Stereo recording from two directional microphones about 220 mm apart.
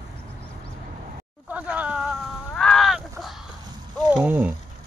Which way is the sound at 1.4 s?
5° right (ahead or behind).